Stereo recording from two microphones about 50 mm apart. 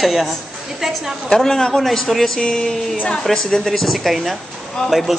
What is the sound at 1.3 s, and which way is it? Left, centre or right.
A man's voice, centre.